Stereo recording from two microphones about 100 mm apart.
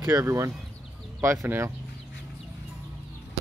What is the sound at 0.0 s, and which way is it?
Speech, 30° right (ahead or behind).